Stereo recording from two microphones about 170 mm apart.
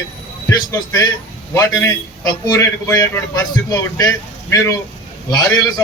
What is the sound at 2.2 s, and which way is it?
A man's voice, 20° left (ahead or behind).